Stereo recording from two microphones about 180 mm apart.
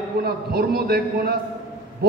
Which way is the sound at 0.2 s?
60° right (ahead or behind).